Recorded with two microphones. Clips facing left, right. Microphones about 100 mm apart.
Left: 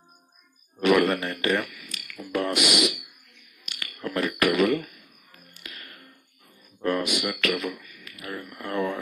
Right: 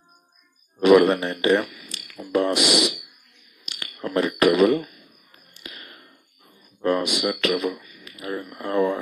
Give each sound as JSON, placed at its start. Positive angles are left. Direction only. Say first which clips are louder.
{"t": 0.7, "sound": "speech", "louder": "right 6 dB", "side_deg": -20}
{"t": 3.6, "sound": "a sound", "louder": "right 2 dB", "side_deg": -20}
{"t": 5.5, "sound": "music", "louder": "right 3 dB", "side_deg": -20}
{"t": 6.8, "sound": "speech", "louder": "right 4 dB", "side_deg": -20}